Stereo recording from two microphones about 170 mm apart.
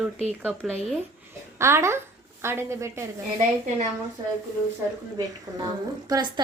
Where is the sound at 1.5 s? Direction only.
15° right (ahead or behind).